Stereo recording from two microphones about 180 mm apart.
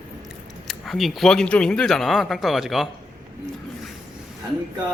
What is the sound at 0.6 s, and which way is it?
Speech, centre (ahead or behind).